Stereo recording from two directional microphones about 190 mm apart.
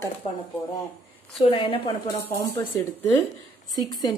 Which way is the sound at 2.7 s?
10° left (ahead or behind).